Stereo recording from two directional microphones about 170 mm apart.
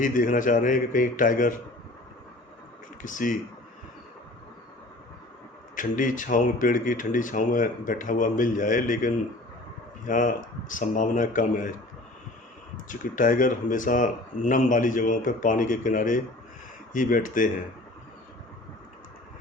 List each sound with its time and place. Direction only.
0.0 s speech: 50° left (ahead or behind)
3.0 s speech: 50° left (ahead or behind)
5.7 s speech: 50° left (ahead or behind)
12.7 s speech: 50° left (ahead or behind)